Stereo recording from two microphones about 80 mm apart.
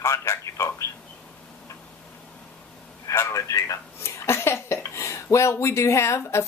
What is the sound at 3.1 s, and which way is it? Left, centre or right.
Speech, left.